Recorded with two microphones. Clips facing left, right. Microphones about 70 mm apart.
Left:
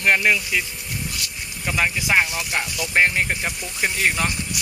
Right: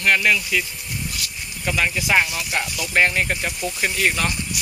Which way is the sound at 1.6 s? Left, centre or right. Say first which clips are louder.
Even; centre.